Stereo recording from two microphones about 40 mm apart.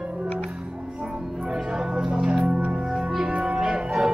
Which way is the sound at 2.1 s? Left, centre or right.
Right.